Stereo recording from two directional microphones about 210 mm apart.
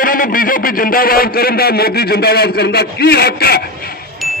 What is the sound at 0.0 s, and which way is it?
A man's voice, 40° left (ahead or behind).